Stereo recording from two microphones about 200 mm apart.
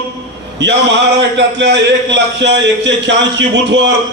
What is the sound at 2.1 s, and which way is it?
A man's voice, 60° right (ahead or behind).